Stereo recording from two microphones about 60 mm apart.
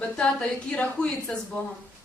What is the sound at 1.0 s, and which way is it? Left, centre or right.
Speech, right.